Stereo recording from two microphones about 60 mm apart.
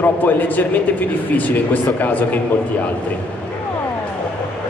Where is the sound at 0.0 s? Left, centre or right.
Left.